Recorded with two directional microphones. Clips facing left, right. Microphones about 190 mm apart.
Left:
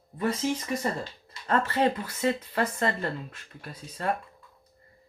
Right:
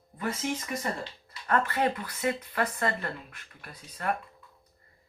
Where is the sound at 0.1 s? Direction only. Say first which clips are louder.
Left 5 dB; 25° left (ahead or behind).